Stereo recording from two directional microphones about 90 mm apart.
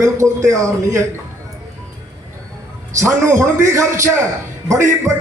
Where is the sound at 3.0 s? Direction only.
30° right (ahead or behind).